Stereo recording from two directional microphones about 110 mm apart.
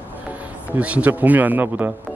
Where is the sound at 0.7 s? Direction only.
10° right (ahead or behind).